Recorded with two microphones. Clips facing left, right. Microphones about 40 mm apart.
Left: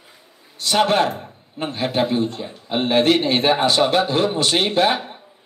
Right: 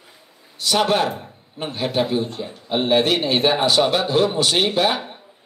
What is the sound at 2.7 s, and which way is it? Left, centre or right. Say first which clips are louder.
A man's voice: left 1 dB; left.